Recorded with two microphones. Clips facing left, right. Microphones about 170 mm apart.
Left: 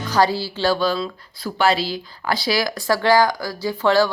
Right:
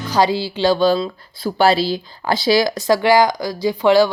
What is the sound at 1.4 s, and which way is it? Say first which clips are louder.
A woman's voice: right 4 dB; 30° right (ahead or behind).